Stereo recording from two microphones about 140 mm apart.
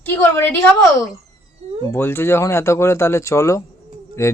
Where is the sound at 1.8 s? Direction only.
15° left (ahead or behind).